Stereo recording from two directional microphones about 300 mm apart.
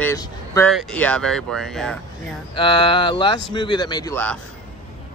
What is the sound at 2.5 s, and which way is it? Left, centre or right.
Speech, centre.